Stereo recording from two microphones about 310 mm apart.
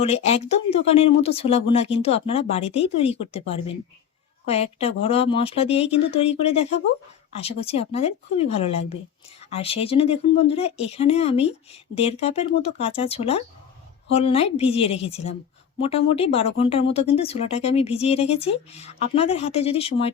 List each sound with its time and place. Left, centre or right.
0.0 s speech: centre